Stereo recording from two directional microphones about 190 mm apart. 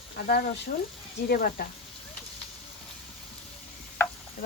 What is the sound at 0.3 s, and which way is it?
Speech, 55° left (ahead or behind).